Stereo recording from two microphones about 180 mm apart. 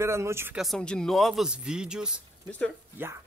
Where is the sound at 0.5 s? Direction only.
Centre (ahead or behind).